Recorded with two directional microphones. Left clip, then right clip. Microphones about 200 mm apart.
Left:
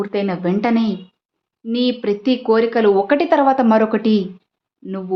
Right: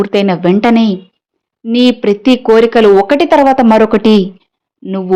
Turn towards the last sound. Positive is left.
turn(degrees=-30)  # may be behind; listen again after turning